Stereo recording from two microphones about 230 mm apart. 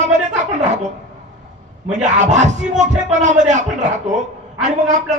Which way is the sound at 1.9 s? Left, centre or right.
Right.